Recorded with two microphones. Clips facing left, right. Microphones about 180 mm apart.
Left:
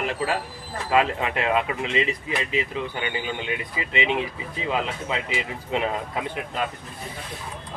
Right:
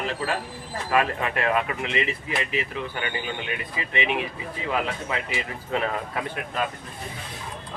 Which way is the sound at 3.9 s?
20° left (ahead or behind).